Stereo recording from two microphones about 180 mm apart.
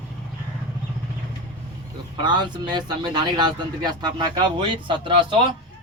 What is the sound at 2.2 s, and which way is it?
Speech, 25° right (ahead or behind).